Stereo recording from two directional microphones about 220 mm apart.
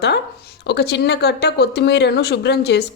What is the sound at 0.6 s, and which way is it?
A woman's voice, 50° left (ahead or behind).